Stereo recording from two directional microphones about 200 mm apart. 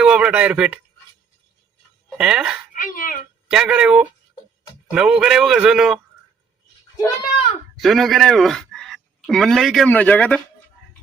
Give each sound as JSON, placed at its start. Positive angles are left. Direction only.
{"t": 0.0, "sound": "speech", "side_deg": -5}
{"t": 2.0, "sound": "speech", "side_deg": -5}
{"t": 2.7, "sound": "speech", "side_deg": 45}
{"t": 3.5, "sound": "a man's voice", "side_deg": -5}
{"t": 7.8, "sound": "speech", "side_deg": 0}